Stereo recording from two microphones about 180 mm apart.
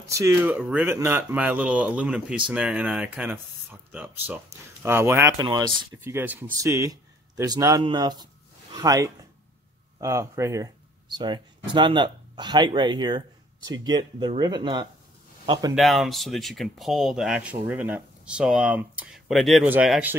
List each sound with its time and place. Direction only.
0.1 s a man's voice: 15° right (ahead or behind)
15.7 s speech: centre (ahead or behind)